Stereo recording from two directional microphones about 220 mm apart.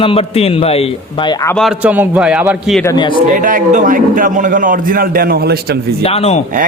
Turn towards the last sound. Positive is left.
turn(degrees=30)  # may be behind; listen again after turning